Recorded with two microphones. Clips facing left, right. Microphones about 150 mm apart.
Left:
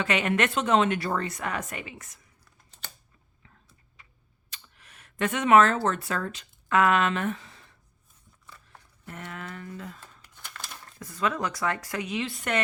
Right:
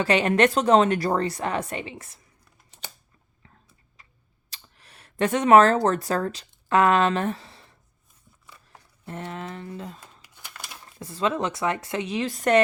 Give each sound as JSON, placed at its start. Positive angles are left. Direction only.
{"t": 0.0, "sound": "a woman's voice", "side_deg": -35}
{"t": 4.0, "sound": "tick-tock", "side_deg": -35}
{"t": 4.4, "sound": "speech", "side_deg": -35}
{"t": 9.0, "sound": "speech", "side_deg": -30}
{"t": 10.2, "sound": "crumpling", "side_deg": -10}
{"t": 10.9, "sound": "speech", "side_deg": -30}